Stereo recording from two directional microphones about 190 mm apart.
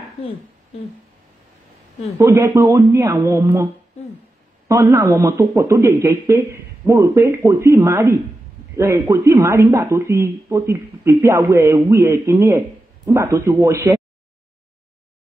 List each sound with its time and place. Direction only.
2.1 s speech: 15° right (ahead or behind)
4.6 s a man's voice: 15° right (ahead or behind)